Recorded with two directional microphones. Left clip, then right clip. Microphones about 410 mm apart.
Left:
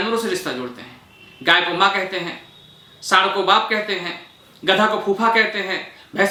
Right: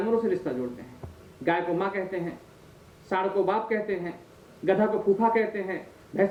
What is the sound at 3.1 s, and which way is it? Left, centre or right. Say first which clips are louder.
Speech: left 10 dB; left.